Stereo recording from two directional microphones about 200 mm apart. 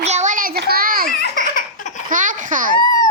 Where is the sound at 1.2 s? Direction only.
45° left (ahead or behind).